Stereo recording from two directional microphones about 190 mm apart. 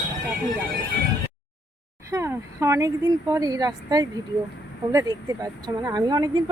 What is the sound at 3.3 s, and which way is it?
Speech, 20° right (ahead or behind).